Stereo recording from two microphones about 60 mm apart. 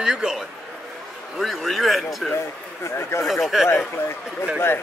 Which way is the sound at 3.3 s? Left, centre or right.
Centre.